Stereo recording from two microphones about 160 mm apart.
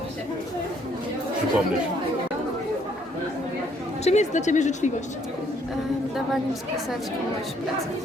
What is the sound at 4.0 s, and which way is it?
Speech, 45° left (ahead or behind).